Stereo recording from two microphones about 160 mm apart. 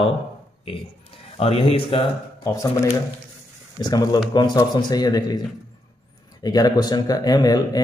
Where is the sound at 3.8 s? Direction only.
25° left (ahead or behind).